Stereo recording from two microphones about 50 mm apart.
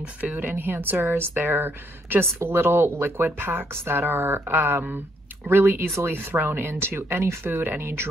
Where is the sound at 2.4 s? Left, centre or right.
Right.